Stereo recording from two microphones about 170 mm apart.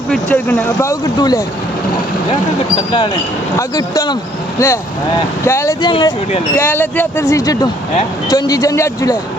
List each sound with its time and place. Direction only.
0.1 s speech: 10° left (ahead or behind)
3.6 s speech: 20° left (ahead or behind)
5.5 s speech: 15° left (ahead or behind)
6.6 s speech: 10° left (ahead or behind)